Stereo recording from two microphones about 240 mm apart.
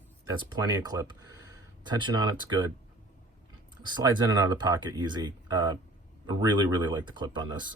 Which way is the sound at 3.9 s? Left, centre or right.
Centre.